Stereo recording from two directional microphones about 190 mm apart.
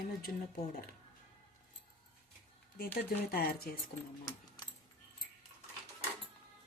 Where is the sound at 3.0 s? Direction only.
55° left (ahead or behind).